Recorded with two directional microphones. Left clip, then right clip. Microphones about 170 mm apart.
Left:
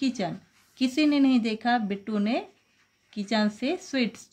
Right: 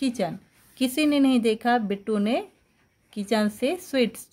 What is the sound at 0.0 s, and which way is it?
Speech, 40° right (ahead or behind).